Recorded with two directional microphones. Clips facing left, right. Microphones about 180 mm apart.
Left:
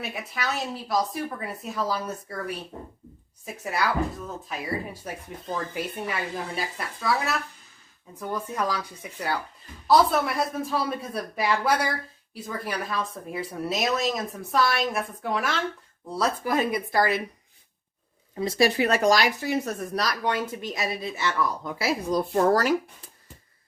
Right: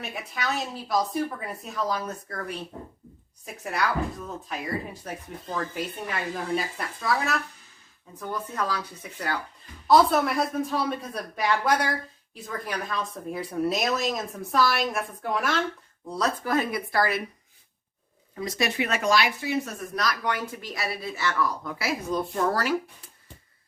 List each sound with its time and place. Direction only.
0.0 s speech: centre (ahead or behind)
8.1 s speech: 10° left (ahead or behind)
9.8 s speech: centre (ahead or behind); by 17.2 s 20° left (ahead or behind)
18.3 s speech: 30° left (ahead or behind)